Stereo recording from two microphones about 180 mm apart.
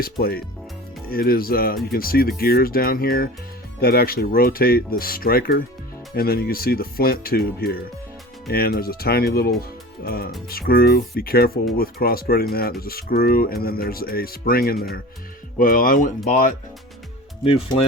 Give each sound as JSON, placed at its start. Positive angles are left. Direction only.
{"t": 0.0, "sound": "speech", "side_deg": 55}
{"t": 9.6, "sound": "music", "side_deg": 55}
{"t": 10.5, "sound": "speech", "side_deg": 55}
{"t": 17.4, "sound": "speech", "side_deg": 30}